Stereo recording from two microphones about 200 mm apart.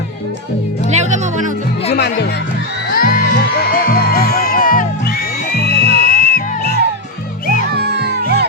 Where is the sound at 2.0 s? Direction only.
55° left (ahead or behind).